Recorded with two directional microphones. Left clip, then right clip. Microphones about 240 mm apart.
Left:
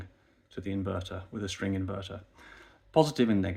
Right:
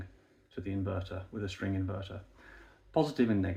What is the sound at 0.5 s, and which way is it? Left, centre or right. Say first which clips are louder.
Speech: left 3 dB; left.